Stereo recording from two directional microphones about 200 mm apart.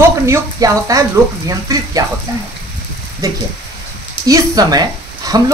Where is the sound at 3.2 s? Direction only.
15° right (ahead or behind).